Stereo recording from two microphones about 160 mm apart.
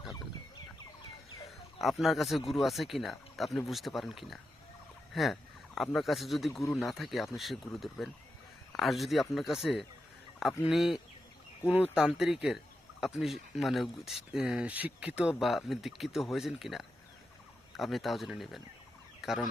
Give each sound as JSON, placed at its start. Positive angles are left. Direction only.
{"t": 0.0, "sound": "turkey", "side_deg": 25}
{"t": 1.5, "sound": "a sound", "side_deg": 0}
{"t": 2.5, "sound": "speech", "side_deg": 0}
{"t": 6.5, "sound": "a man's voice", "side_deg": 15}
{"t": 6.8, "sound": "speech", "side_deg": 0}